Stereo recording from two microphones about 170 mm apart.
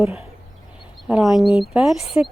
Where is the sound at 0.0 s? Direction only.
5° right (ahead or behind).